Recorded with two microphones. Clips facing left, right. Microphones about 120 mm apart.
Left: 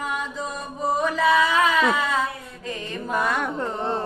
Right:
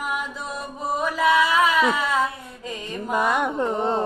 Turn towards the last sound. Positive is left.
turn(degrees=-20)  # may be behind; listen again after turning